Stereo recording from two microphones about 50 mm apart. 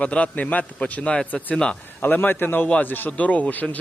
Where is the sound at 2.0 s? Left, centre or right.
Left.